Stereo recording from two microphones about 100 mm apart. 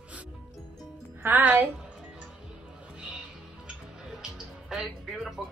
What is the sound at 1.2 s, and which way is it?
Speech, 15° right (ahead or behind).